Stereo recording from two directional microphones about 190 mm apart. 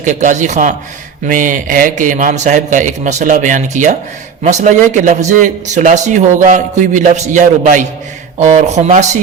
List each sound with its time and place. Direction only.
0.0 s a man's voice: 40° right (ahead or behind)